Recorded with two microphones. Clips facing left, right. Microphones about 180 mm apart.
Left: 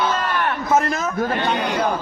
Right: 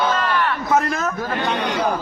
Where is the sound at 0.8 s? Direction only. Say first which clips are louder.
Even; centre (ahead or behind).